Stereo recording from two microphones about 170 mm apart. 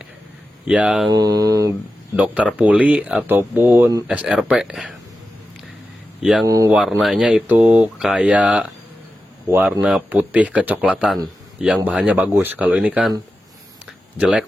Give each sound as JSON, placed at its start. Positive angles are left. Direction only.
{"t": 0.7, "sound": "speech", "side_deg": -5}
{"t": 1.1, "sound": "speech", "side_deg": -20}
{"t": 2.1, "sound": "speech", "side_deg": -5}
{"t": 6.4, "sound": "speech", "side_deg": -20}
{"t": 6.7, "sound": "speech", "side_deg": 0}
{"t": 14.2, "sound": "speech", "side_deg": -5}